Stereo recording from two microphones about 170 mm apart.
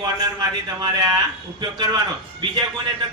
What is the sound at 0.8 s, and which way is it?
Speech, 25° right (ahead or behind).